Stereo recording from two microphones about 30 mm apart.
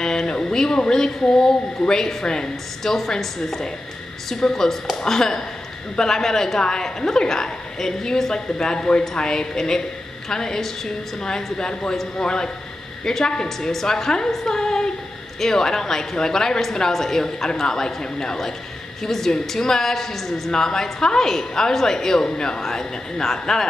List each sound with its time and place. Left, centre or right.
0.0 s a woman's voice: left
2.8 s a woman's voice: centre
13.6 s a woman's voice: centre